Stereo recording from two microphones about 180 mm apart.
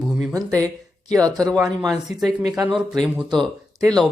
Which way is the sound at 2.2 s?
Centre (ahead or behind).